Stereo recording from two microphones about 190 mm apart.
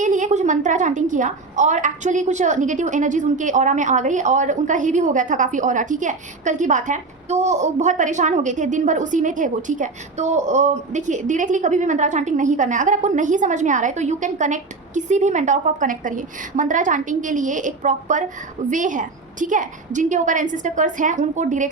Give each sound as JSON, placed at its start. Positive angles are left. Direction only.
{"t": 0.0, "sound": "a woman's voice", "side_deg": -40}